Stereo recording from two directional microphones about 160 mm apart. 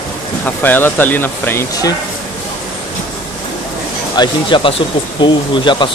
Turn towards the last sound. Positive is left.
turn(degrees=30)  # may be behind; listen again after turning